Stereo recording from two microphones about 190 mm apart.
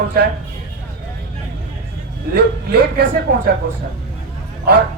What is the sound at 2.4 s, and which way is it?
Speech, 60° right (ahead or behind).